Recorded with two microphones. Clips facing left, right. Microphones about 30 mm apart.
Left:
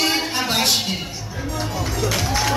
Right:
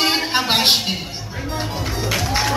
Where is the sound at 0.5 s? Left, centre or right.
Right.